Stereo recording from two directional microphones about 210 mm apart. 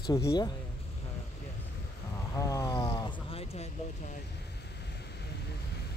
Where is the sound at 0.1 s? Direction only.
15° left (ahead or behind).